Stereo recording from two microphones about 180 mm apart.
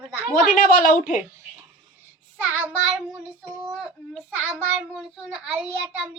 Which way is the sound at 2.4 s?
10° right (ahead or behind).